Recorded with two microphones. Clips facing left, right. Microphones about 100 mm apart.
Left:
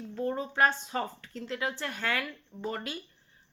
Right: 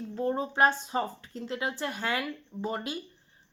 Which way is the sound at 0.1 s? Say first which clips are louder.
Right 2 dB; 25° right (ahead or behind).